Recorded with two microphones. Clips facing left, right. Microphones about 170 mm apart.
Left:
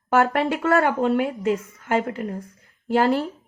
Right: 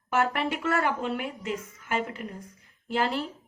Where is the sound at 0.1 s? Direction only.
60° left (ahead or behind).